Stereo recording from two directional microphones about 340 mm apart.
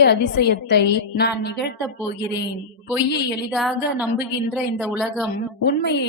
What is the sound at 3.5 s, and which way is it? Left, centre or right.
A woman's voice, centre.